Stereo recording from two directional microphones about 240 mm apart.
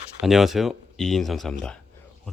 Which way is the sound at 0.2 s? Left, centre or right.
Centre.